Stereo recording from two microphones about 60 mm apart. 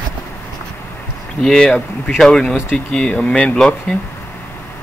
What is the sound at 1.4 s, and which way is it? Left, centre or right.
Speech, centre.